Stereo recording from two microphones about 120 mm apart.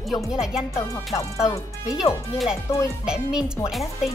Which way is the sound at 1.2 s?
25° left (ahead or behind).